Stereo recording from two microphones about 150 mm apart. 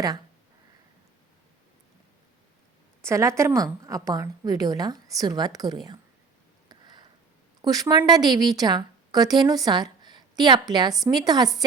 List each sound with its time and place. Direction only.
3.0 s a woman's voice: 20° right (ahead or behind)
6.7 s a sound: 30° right (ahead or behind)
7.6 s a woman's voice: 25° right (ahead or behind)